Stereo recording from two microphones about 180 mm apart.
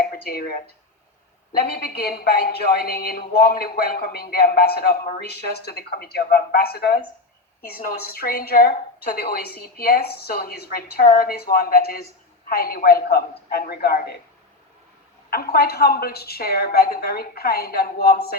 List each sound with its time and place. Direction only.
0.0 s a woman's voice: 55° left (ahead or behind)
15.3 s a woman's voice: 60° left (ahead or behind)